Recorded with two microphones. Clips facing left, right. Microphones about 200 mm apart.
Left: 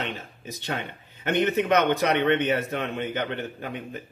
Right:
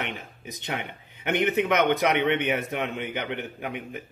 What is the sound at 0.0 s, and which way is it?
A man's voice, 15° right (ahead or behind).